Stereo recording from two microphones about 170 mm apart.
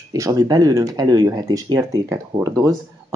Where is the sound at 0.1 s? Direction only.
20° right (ahead or behind).